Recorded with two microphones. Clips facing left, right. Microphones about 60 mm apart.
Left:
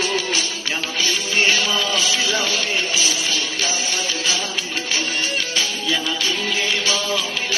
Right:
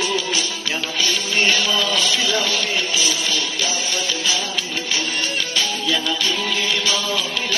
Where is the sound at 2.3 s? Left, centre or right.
Left.